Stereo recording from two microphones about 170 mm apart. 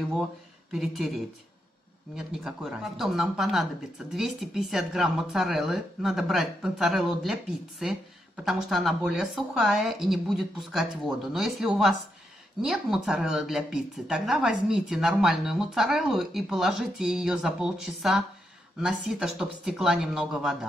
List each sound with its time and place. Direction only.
0.7 s a woman's voice: centre (ahead or behind)